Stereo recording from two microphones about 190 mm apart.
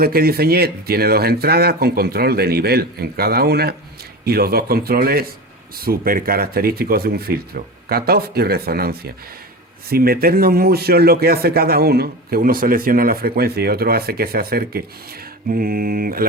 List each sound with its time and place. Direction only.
0.0 s speech: 55° right (ahead or behind)